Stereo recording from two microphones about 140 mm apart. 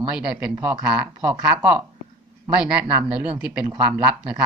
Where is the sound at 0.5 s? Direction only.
20° right (ahead or behind).